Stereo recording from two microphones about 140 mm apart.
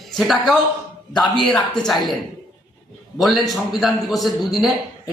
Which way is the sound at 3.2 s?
Centre (ahead or behind).